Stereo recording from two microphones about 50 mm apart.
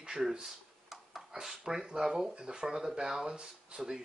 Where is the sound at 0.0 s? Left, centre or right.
Centre.